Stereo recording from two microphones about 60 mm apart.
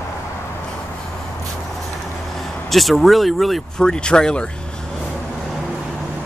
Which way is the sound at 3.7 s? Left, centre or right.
Centre.